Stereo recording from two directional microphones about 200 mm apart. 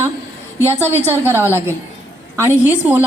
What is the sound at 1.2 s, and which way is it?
A woman's voice, 10° right (ahead or behind).